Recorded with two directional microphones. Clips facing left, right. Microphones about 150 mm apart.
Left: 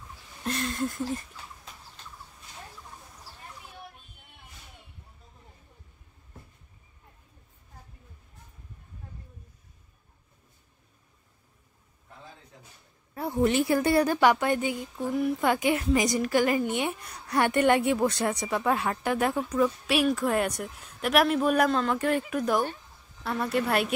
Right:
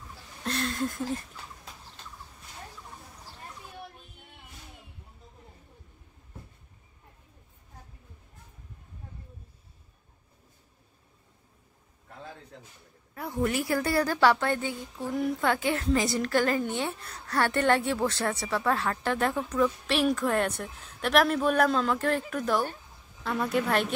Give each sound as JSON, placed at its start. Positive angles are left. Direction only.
{"t": 0.4, "sound": "a sound", "side_deg": 0}
{"t": 13.1, "sound": "a woman's voice", "side_deg": 25}
{"t": 23.2, "sound": "a woman's voice", "side_deg": 0}